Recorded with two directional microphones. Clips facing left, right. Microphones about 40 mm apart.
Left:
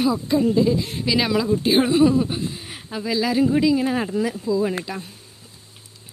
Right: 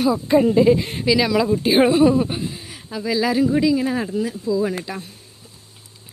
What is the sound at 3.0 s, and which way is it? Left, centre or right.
Speech, centre.